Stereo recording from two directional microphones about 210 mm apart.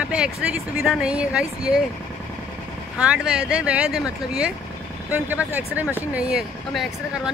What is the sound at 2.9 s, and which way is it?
Speech, 5° right (ahead or behind).